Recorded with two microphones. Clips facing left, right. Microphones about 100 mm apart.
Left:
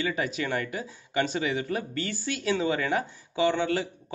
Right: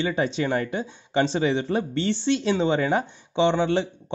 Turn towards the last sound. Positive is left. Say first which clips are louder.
# right 4 dB
turn(degrees=-25)  # may be behind; listen again after turning